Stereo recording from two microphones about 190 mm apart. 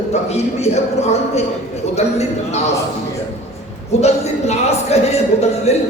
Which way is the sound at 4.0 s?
35° left (ahead or behind).